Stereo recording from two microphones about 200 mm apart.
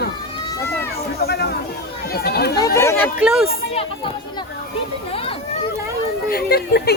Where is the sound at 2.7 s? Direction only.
15° left (ahead or behind).